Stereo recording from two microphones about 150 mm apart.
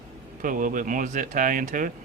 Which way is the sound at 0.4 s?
65° right (ahead or behind).